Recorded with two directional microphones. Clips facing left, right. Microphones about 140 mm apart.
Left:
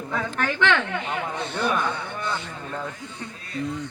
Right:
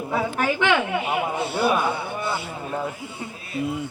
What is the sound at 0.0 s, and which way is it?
A man's voice, 10° right (ahead or behind).